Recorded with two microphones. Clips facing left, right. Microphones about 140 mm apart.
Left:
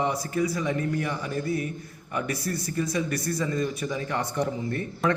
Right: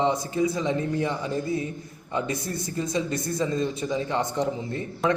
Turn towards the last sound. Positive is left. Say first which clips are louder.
# right 1 dB
turn(degrees=-20)  # may be behind; listen again after turning